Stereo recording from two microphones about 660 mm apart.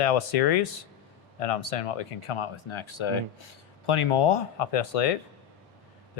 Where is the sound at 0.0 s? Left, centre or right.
Left.